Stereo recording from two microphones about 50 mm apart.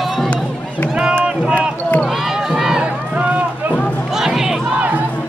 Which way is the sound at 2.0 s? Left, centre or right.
Centre.